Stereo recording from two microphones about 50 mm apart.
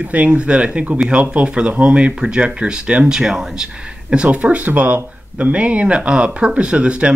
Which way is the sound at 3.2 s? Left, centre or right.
Centre.